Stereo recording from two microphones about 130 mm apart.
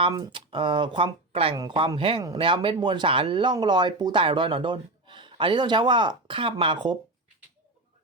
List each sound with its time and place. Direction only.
0.1 s speech: 35° right (ahead or behind)